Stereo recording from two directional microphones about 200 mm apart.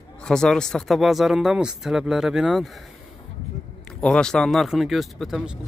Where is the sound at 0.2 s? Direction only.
5° left (ahead or behind).